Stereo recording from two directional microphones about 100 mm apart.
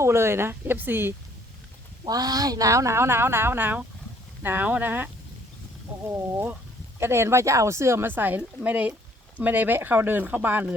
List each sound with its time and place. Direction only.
0.0 s speech: 25° right (ahead or behind)
2.0 s speech: 40° right (ahead or behind); by 10.8 s 20° right (ahead or behind)